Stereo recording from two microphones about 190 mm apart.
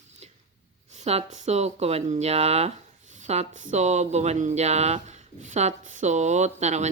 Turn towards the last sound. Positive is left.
turn(degrees=-35)  # may be behind; listen again after turning